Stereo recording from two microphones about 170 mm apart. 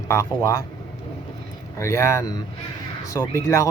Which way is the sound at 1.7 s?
15° left (ahead or behind).